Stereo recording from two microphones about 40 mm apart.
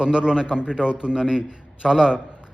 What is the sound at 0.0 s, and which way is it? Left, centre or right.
A man's voice, centre.